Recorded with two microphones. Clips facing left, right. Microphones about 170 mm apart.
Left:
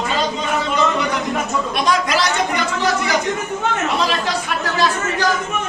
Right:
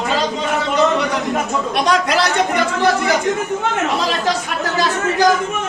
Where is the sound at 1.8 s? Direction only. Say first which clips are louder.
Right 2 dB; 60° right (ahead or behind).